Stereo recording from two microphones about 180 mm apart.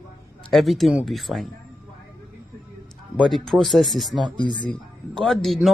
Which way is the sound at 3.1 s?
Centre (ahead or behind).